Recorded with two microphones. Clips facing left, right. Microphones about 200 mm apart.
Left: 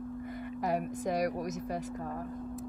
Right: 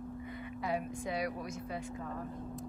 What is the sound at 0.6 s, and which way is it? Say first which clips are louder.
Speech: left 4 dB; 45° left (ahead or behind).